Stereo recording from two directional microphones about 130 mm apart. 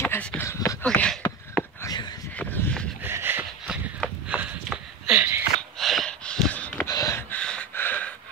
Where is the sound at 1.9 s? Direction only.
30° left (ahead or behind).